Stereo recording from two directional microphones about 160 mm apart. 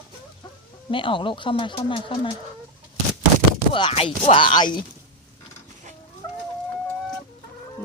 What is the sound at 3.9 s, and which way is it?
Speech, 40° left (ahead or behind).